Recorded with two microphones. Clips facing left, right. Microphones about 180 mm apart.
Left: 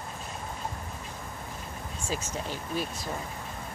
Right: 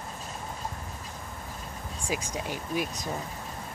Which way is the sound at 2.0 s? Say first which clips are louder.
Right 1 dB; 15° right (ahead or behind).